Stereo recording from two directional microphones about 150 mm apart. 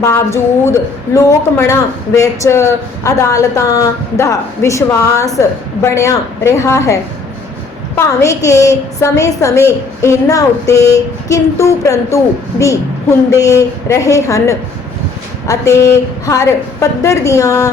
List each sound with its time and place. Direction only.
0.0 s speech: 20° left (ahead or behind)